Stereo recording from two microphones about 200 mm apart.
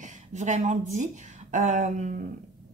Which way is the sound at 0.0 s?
35° right (ahead or behind).